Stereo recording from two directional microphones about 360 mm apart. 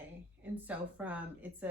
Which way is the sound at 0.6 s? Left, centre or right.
Centre.